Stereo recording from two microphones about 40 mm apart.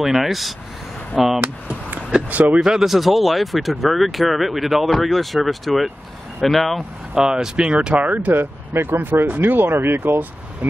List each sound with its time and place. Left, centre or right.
0.0 s speech: centre
2.6 s speech: centre
7.2 s speech: centre
8.0 s speech: right
8.3 s speech: right